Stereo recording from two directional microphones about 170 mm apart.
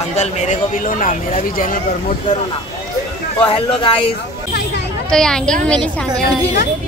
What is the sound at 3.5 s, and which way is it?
Speech, 30° left (ahead or behind).